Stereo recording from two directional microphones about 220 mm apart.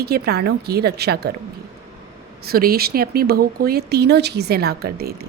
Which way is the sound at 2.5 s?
45° right (ahead or behind).